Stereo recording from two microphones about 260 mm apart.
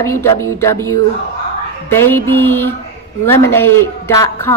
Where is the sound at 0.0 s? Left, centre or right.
Centre.